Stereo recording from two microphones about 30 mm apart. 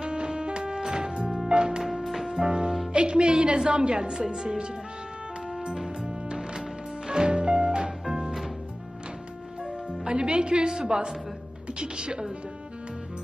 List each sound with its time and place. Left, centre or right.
0.0 s music: right
1.8 s music: centre
2.4 s music: right
2.9 s a woman's voice: right
7.1 s music: right
10.0 s a woman's voice: right